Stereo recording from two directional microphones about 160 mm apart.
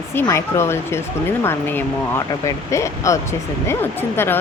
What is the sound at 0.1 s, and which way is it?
Speech, 15° left (ahead or behind).